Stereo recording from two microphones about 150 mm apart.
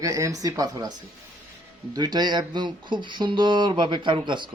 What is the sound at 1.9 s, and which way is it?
Speech, 30° right (ahead or behind).